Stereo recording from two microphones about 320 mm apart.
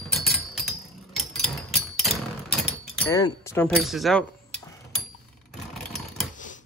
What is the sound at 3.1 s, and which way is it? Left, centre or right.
Speech, centre.